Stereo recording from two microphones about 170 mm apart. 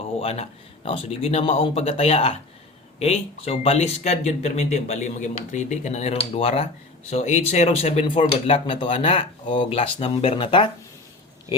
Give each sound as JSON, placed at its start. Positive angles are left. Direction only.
{"t": 0.2, "sound": "speech", "side_deg": 35}